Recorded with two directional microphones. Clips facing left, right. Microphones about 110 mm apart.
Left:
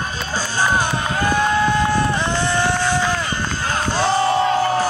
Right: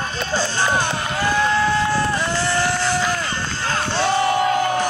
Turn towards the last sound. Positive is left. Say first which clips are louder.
# left 1 dB
turn(degrees=30)  # may be behind; listen again after turning